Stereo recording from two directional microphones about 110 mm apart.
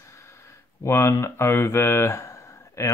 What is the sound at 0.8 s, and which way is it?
Speech, 25° left (ahead or behind).